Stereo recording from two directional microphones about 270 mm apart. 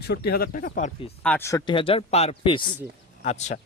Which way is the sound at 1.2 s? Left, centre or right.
Centre.